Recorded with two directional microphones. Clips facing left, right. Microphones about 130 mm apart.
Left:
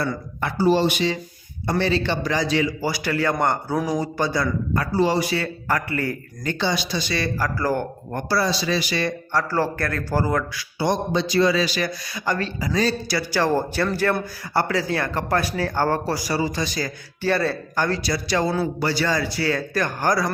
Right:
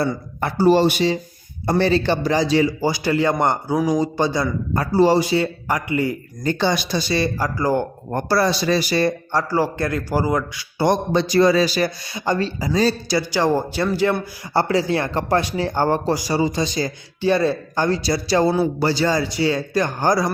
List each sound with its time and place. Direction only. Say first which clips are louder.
0.6 s speech: right 4 dB; 45° right (ahead or behind); by 6.1 s 15° right (ahead or behind)
6.4 s speech: right 4 dB; 40° right (ahead or behind)
7.1 s speech: right 4 dB; 25° right (ahead or behind)
8.1 s speech: right 4 dB; 50° right (ahead or behind)
9.5 s a man's voice: right 3 dB; 15° right (ahead or behind)
10.8 s speech: right 4 dB; 55° right (ahead or behind); by 14.2 s 15° right (ahead or behind)
14.5 s speech: right 4 dB; 25° right (ahead or behind)